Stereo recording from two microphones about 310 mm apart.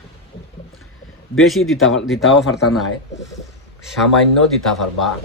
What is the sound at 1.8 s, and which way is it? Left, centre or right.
Speech, left.